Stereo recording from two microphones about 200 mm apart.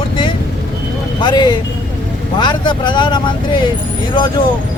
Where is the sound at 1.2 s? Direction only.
20° left (ahead or behind).